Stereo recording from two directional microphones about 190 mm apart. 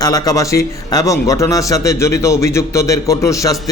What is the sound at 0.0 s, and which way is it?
A man's voice, 20° left (ahead or behind).